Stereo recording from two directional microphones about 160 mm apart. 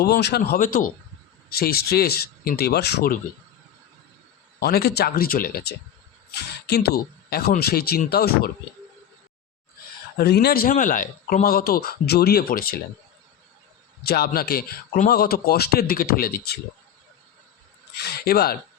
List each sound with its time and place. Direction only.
0.0 s speech: 90° left; by 0.9 s 60° left (ahead or behind)
1.5 s speech: 75° left (ahead or behind)
4.6 s speech: 80° left
6.7 s speech: 80° left
10.2 s speech: 80° left
14.0 s speech: 75° left (ahead or behind)
17.9 s speech: 90° left; by 18.5 s 75° left (ahead or behind)